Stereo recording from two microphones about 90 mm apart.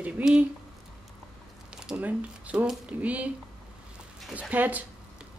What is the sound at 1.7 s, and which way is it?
Speech, 10° right (ahead or behind).